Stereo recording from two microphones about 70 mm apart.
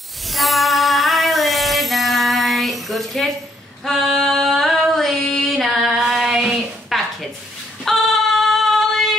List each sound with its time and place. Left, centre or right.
0.3 s female singing: centre